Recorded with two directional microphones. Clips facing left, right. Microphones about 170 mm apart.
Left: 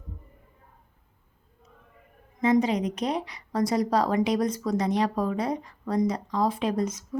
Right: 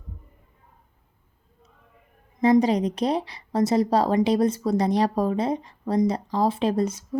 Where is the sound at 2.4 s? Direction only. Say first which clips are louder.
Right 4 dB; 35° right (ahead or behind).